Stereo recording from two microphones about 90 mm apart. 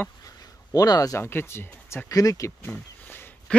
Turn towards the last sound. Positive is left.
turn(degrees=20)  # may be behind; listen again after turning